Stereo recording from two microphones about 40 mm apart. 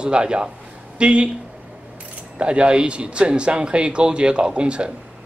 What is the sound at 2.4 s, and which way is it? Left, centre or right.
Speech, right.